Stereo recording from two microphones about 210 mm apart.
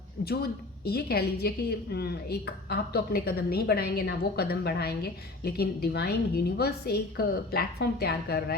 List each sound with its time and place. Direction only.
0.2 s speech: 50° left (ahead or behind)